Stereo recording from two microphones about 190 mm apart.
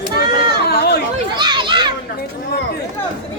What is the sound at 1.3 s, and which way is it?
Speech, 25° right (ahead or behind).